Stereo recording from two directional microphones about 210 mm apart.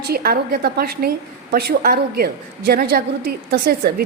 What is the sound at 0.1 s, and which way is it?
A woman's voice, 45° right (ahead or behind).